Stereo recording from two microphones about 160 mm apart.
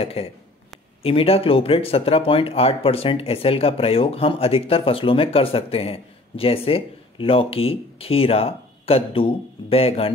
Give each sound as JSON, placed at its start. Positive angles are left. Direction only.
{"t": 0.0, "sound": "speech", "side_deg": 40}